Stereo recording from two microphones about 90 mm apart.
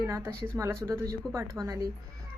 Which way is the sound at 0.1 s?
25° right (ahead or behind).